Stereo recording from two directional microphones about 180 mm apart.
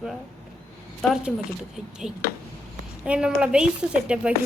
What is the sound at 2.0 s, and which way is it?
Speech, 5° right (ahead or behind).